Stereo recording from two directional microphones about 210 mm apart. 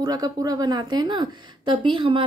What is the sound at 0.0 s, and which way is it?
A woman's voice, 20° right (ahead or behind).